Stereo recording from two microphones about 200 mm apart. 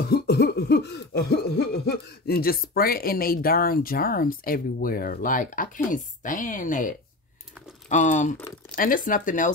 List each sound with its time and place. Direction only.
0.0 s cough: 55° left (ahead or behind)
7.9 s speech: 35° left (ahead or behind)
8.7 s cough: 45° left (ahead or behind)